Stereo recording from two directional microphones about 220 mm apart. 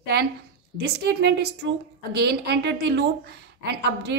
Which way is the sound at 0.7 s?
50° right (ahead or behind).